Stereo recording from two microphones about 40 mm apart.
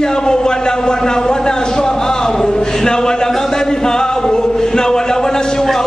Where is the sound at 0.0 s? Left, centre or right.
Centre.